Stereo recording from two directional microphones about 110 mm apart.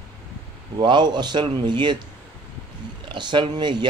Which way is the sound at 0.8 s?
45° right (ahead or behind).